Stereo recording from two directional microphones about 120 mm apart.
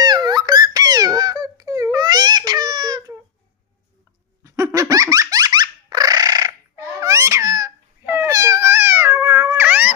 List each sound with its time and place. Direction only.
0.0 s giggle: 35° right (ahead or behind)
4.4 s dog: 25° right (ahead or behind)
7.0 s babbling: 25° right (ahead or behind)
8.3 s cat: 30° right (ahead or behind)
9.6 s cat: 15° right (ahead or behind)